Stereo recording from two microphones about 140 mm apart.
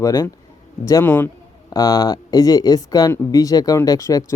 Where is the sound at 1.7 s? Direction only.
25° left (ahead or behind).